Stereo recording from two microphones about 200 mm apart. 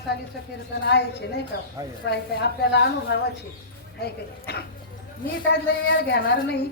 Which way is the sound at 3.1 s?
55° left (ahead or behind).